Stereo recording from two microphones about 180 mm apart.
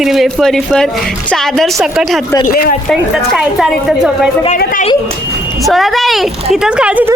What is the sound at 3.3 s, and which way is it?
Speech, centre (ahead or behind).